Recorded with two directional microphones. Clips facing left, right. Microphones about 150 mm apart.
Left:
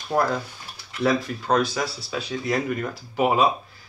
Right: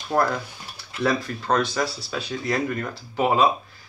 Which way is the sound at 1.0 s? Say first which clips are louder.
Left 1 dB; 5° left (ahead or behind).